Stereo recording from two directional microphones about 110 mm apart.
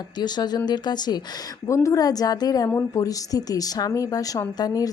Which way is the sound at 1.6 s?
30° left (ahead or behind).